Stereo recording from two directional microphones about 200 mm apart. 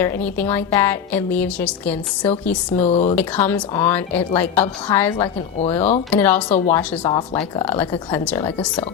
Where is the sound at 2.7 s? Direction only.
35° left (ahead or behind).